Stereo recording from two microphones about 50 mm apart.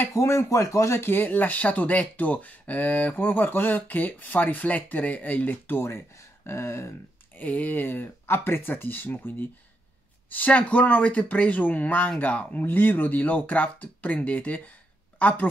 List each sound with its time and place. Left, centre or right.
0.1 s speech: left
1.0 s speech: left
5.8 s speech: left
7.3 s speech: left
10.3 s speech: left
12.6 s speech: left